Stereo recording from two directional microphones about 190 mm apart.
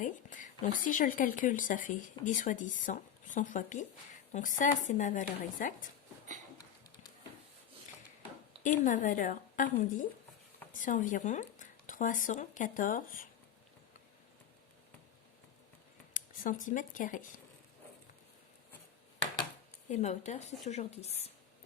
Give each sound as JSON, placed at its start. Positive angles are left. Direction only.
{"t": 0.0, "sound": "a woman's voice", "side_deg": 40}
{"t": 8.6, "sound": "a woman's voice", "side_deg": 40}
{"t": 16.1, "sound": "speech", "side_deg": 45}
{"t": 19.9, "sound": "speech", "side_deg": 35}